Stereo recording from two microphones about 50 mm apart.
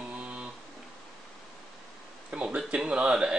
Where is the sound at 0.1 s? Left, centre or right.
Right.